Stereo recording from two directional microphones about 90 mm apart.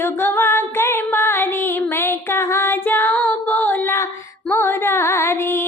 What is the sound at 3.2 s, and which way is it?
Music, 15° left (ahead or behind).